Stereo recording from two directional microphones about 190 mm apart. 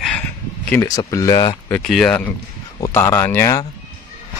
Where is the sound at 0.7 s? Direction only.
15° left (ahead or behind).